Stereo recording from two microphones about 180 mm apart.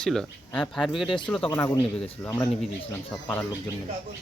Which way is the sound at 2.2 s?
15° left (ahead or behind).